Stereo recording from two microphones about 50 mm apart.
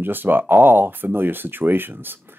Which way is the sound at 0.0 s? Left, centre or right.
Right.